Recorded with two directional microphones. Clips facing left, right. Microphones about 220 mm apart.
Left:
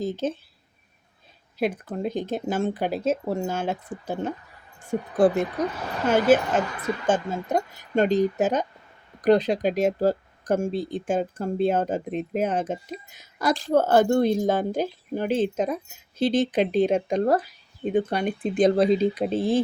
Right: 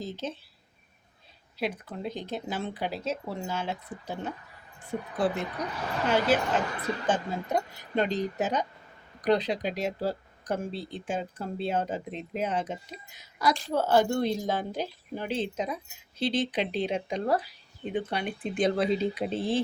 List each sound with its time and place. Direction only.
0.0 s speech: 50° left (ahead or behind)
1.5 s speech: 50° left (ahead or behind)